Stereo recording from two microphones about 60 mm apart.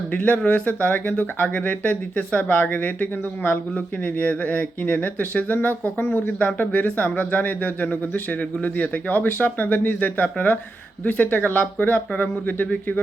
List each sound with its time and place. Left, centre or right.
0.1 s speech: left